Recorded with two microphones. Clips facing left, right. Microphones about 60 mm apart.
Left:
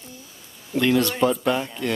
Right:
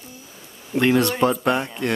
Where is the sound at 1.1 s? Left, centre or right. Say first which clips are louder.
Right 1 dB; centre.